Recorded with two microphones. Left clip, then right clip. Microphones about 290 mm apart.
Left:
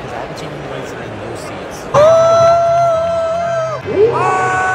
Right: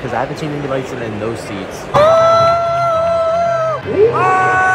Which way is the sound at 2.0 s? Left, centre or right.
Centre.